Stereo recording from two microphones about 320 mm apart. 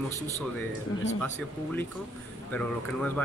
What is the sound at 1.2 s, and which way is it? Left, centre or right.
Speech, centre.